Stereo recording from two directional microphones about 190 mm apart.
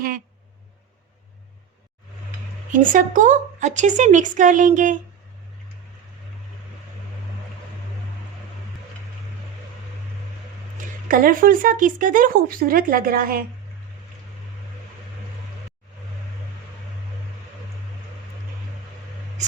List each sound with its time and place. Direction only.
2.7 s speech: 45° right (ahead or behind)
10.8 s speech: 45° right (ahead or behind)